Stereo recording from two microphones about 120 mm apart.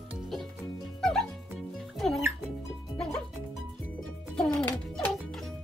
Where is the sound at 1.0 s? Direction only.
5° left (ahead or behind).